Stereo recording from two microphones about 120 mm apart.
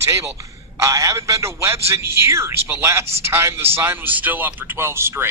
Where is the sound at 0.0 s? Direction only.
25° right (ahead or behind).